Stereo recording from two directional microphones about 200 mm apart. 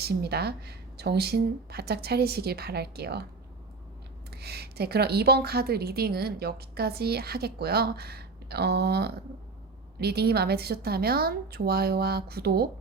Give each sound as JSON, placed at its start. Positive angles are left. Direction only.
{"t": 0.0, "sound": "a woman's voice", "side_deg": -55}
{"t": 4.3, "sound": "a woman's voice", "side_deg": -55}